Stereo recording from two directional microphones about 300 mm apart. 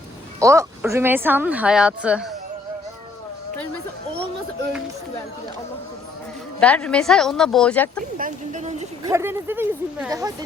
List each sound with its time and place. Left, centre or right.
0.3 s speech: centre
6.6 s speech: centre
8.2 s speech: right
9.0 s speech: centre